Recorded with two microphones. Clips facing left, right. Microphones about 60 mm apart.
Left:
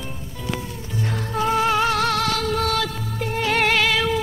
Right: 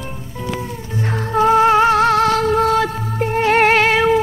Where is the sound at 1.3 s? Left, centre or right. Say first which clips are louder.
Right 8 dB; right.